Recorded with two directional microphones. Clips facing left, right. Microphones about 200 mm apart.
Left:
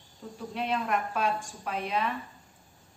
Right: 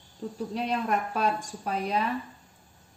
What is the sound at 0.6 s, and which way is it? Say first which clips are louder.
Speech: right 1 dB; 35° right (ahead or behind).